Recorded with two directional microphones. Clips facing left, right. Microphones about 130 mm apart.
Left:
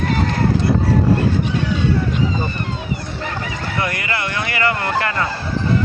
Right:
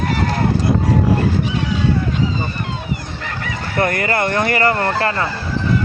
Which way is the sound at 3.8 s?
50° right (ahead or behind).